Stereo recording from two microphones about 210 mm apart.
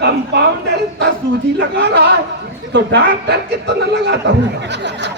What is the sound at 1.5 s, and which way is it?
A man's voice, 55° right (ahead or behind).